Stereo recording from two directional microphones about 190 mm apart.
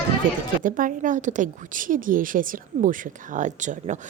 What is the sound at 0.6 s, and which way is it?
A woman's voice, 45° right (ahead or behind).